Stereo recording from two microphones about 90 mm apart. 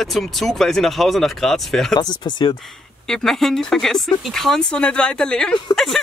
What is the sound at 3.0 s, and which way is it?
Speech, 5° left (ahead or behind).